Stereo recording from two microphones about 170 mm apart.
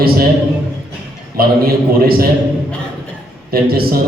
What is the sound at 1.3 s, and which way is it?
Speech, 60° right (ahead or behind).